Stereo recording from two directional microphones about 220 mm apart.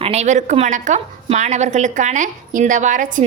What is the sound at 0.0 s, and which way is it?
A woman's voice, 30° right (ahead or behind).